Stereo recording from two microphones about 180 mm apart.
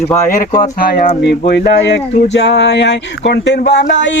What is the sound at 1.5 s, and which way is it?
Speech, 65° left (ahead or behind).